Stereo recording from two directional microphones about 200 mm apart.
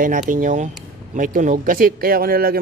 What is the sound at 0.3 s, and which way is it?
Speech, 40° right (ahead or behind).